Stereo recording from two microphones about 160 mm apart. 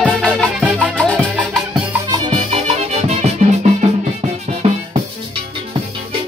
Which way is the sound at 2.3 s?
40° right (ahead or behind).